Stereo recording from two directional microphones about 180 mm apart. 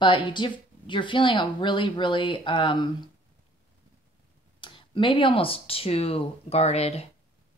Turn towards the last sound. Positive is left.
turn(degrees=35)  # may be behind; listen again after turning